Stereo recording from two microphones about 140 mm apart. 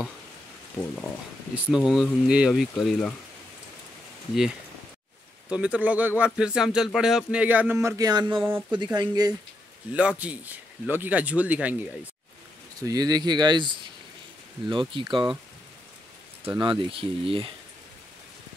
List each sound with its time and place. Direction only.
1.5 s speech: 5° right (ahead or behind)
5.5 s speech: 10° right (ahead or behind); by 8.4 s 30° right (ahead or behind)
8.5 s speech: 15° right (ahead or behind)
8.7 s speech: 30° right (ahead or behind)
9.9 s speech: 10° right (ahead or behind)
12.8 s speech: 25° right (ahead or behind)
16.4 s speech: 35° right (ahead or behind)